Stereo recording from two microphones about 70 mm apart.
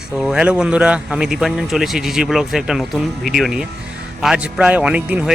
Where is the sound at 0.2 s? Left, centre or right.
Centre.